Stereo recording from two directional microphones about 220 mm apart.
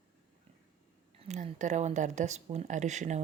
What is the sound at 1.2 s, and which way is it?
Speech, 30° right (ahead or behind).